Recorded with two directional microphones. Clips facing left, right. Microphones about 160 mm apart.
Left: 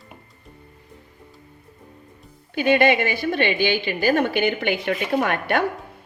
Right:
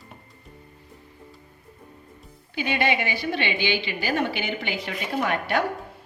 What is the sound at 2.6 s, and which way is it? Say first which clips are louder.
A woman's voice: left 7 dB; 50° left (ahead or behind).